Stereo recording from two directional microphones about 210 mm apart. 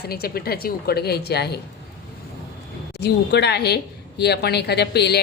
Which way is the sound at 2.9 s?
50° left (ahead or behind).